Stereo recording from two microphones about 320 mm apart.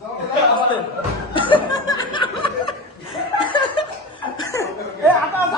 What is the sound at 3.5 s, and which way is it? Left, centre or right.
Chuckle, centre.